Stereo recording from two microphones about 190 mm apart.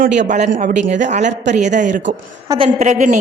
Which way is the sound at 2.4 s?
30° right (ahead or behind).